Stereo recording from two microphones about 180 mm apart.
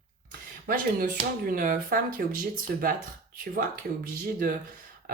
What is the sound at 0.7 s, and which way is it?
Speech, 50° right (ahead or behind).